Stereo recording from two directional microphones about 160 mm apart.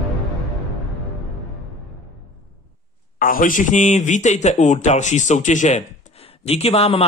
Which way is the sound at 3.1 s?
60° left (ahead or behind).